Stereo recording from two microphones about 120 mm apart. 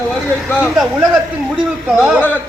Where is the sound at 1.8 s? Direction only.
10° right (ahead or behind).